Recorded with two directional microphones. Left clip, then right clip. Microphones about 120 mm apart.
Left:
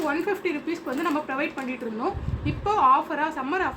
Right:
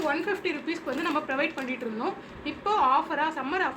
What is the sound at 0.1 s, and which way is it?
A woman's voice, 45° left (ahead or behind).